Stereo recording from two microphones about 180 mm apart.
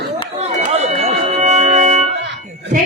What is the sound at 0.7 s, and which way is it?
Music, 35° right (ahead or behind).